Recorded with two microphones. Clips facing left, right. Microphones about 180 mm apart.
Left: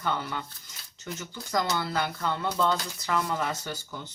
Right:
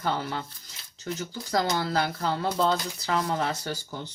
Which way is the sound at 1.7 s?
35° right (ahead or behind).